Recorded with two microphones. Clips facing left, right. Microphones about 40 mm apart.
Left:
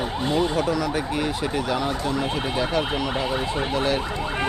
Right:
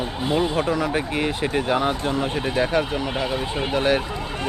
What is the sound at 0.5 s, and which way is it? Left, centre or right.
Speech, right.